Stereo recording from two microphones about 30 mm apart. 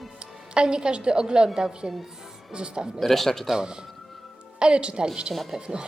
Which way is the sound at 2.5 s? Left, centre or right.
Right.